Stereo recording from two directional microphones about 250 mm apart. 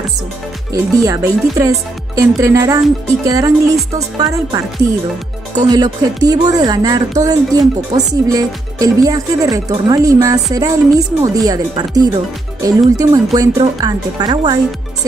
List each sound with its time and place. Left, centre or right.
0.9 s speech: centre